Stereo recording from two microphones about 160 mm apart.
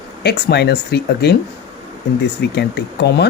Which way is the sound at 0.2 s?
90° left.